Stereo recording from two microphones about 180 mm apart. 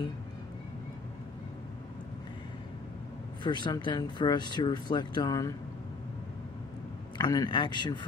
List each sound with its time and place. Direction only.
3.4 s speech: 25° left (ahead or behind)
7.2 s speech: 20° left (ahead or behind)